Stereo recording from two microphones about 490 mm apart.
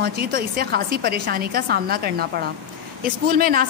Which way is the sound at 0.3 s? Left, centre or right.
Centre.